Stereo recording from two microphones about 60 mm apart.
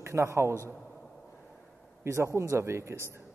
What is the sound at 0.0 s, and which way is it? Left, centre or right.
Speech, right.